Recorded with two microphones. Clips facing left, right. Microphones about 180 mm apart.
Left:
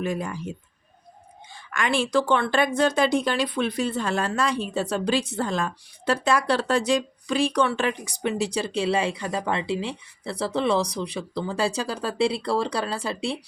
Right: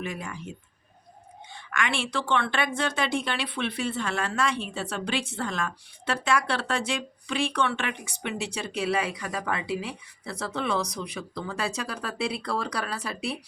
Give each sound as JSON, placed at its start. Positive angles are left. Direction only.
{"t": 0.0, "sound": "a woman's voice", "side_deg": 35}
{"t": 1.5, "sound": "a woman's voice", "side_deg": 35}